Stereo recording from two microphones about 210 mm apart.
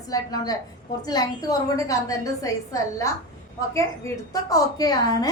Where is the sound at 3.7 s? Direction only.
15° left (ahead or behind).